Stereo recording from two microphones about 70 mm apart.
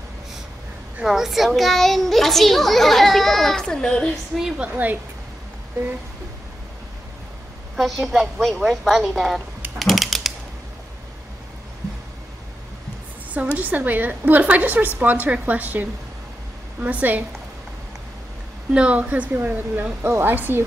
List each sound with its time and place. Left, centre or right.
1.0 s a child's voice: centre
4.6 s a woman's voice: right
7.7 s a child's voice: centre
9.8 s typewriter: centre
13.6 s a woman's voice: right
18.7 s a woman's voice: centre